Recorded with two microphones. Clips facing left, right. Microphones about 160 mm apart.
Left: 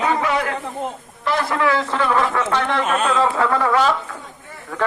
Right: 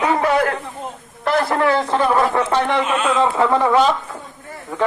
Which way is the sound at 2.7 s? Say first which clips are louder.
Right 1 dB; centre (ahead or behind).